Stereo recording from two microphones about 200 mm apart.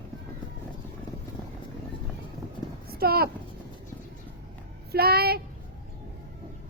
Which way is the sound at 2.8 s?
50° right (ahead or behind).